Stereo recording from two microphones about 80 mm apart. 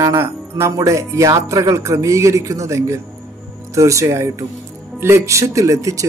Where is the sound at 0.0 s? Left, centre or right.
Right.